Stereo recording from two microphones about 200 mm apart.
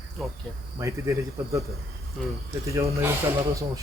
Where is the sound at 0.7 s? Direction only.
15° right (ahead or behind).